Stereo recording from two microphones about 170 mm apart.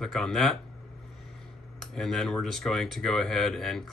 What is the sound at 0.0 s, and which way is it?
Speech, 5° left (ahead or behind).